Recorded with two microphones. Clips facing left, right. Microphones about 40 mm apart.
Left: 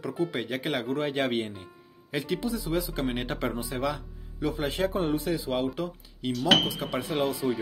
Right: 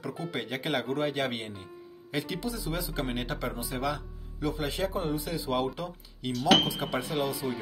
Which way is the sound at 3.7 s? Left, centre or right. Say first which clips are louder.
Left 2 dB; centre.